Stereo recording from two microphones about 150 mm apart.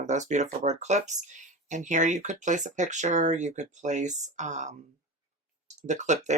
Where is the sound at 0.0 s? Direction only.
50° right (ahead or behind).